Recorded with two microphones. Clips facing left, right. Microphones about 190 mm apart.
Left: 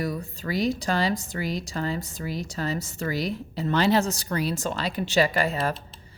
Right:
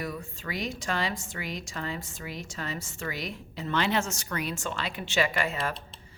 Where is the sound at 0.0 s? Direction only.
35° left (ahead or behind).